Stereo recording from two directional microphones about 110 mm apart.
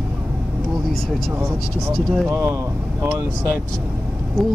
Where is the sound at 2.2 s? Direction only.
25° right (ahead or behind).